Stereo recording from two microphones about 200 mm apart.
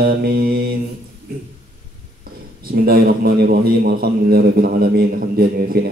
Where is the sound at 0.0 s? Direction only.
50° right (ahead or behind).